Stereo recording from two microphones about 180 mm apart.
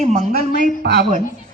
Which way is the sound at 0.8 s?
65° right (ahead or behind).